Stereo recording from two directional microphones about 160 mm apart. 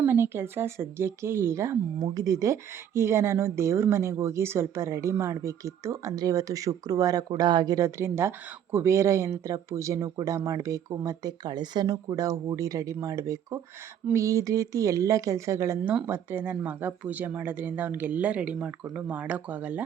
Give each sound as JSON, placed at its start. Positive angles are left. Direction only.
{"t": 0.0, "sound": "speech", "side_deg": -15}